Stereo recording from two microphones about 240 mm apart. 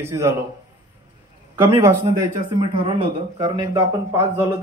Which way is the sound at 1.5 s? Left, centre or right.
Centre.